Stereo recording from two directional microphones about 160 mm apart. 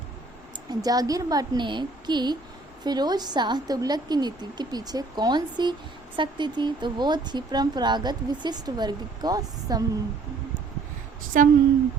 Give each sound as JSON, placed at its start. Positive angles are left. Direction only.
{"t": 0.5, "sound": "speech", "side_deg": -25}
{"t": 11.3, "sound": "a woman's voice", "side_deg": -55}